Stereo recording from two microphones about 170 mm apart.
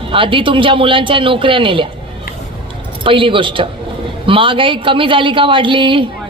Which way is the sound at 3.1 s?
30° right (ahead or behind).